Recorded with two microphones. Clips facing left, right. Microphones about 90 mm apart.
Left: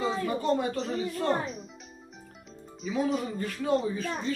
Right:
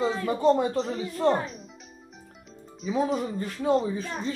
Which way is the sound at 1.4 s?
Centre (ahead or behind).